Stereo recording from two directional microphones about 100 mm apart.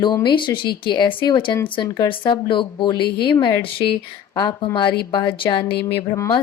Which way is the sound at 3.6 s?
65° left (ahead or behind).